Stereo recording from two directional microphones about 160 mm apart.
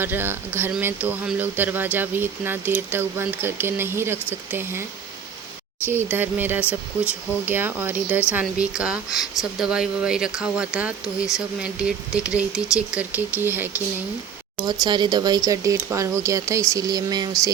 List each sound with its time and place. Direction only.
0.0 s speech: 15° right (ahead or behind)
14.6 s speech: 25° right (ahead or behind)